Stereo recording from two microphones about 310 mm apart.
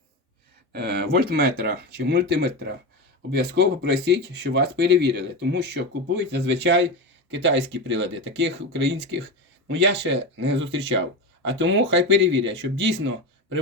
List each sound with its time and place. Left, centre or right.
0.7 s speech: right